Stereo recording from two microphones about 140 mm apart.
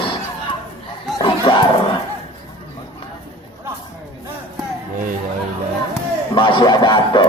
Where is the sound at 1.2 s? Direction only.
35° left (ahead or behind).